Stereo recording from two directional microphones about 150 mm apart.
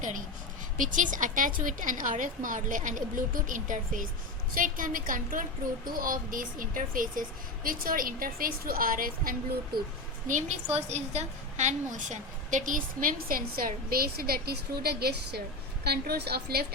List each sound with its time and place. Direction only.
0.8 s a woman's voice: 60° right (ahead or behind)
10.2 s a woman's voice: 50° right (ahead or behind); by 16.6 s 90° right